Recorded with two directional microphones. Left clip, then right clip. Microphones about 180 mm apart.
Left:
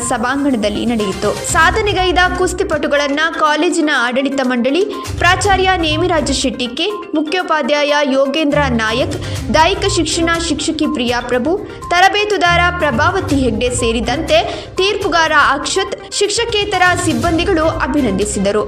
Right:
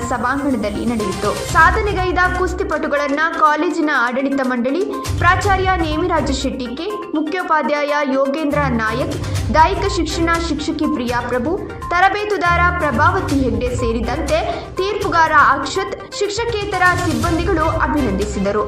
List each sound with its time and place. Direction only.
0.1 s speech: 35° left (ahead or behind)